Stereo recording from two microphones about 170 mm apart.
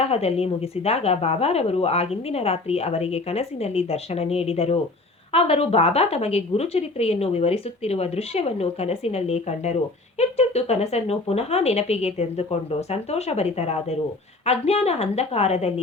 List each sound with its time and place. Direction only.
0.0 s speech: 35° left (ahead or behind)